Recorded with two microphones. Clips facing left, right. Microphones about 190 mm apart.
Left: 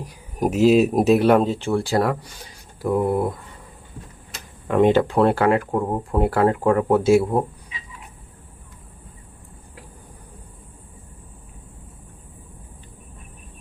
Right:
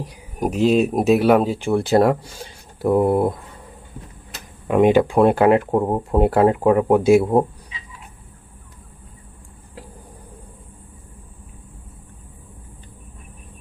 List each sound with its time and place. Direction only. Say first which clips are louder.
0.3 s speech: left 1 dB; centre (ahead or behind); by 3.3 s 25° right (ahead or behind)
4.7 s speech: right 2 dB; 15° right (ahead or behind)